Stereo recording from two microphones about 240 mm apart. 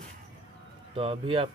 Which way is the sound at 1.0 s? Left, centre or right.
Right.